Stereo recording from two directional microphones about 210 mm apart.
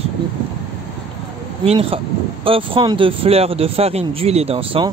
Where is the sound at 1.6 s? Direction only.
25° right (ahead or behind).